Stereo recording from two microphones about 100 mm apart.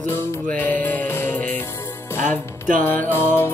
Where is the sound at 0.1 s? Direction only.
15° left (ahead or behind).